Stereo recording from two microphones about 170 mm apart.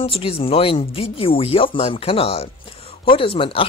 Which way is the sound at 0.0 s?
35° left (ahead or behind).